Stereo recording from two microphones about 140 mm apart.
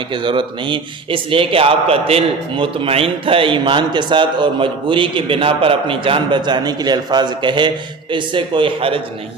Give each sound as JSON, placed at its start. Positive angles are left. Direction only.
{"t": 0.1, "sound": "a man's voice", "side_deg": -35}